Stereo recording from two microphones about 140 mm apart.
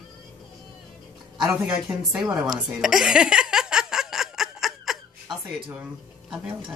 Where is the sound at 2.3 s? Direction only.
5° right (ahead or behind).